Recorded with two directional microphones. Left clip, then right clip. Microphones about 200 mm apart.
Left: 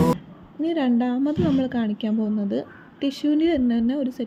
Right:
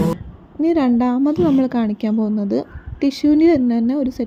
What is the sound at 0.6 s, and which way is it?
A woman's voice, 20° right (ahead or behind).